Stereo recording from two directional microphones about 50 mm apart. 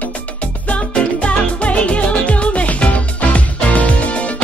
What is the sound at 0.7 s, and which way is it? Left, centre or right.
Music, left.